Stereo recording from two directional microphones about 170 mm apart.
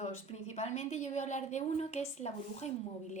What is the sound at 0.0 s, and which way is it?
A woman's voice, 40° left (ahead or behind).